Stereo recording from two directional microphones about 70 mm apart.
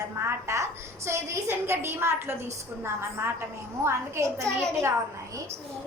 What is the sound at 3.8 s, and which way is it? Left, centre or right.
Speech, right.